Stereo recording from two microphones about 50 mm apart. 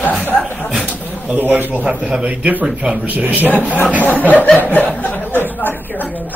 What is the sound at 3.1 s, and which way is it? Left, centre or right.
Speech, right.